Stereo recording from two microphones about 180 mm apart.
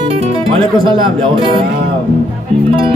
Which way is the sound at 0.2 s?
30° right (ahead or behind).